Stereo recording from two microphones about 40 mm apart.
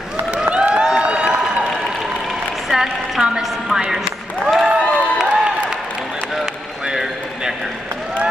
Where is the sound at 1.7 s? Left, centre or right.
Centre.